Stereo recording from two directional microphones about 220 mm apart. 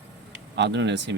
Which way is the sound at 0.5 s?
55° right (ahead or behind).